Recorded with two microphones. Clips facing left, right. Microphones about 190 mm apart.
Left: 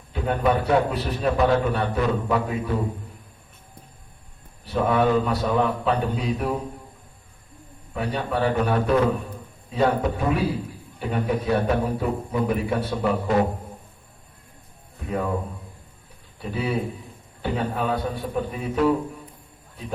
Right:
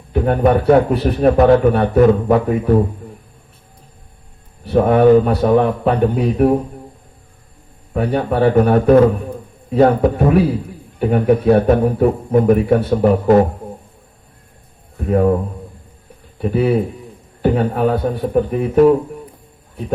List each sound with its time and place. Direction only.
0.1 s a man's voice: 55° right (ahead or behind)
4.6 s a man's voice: 60° right (ahead or behind)
7.9 s a man's voice: 55° right (ahead or behind)
14.9 s speech: 55° right (ahead or behind)
16.4 s a man's voice: 60° right (ahead or behind)